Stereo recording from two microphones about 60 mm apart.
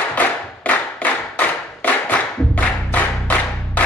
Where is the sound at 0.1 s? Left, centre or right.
Left.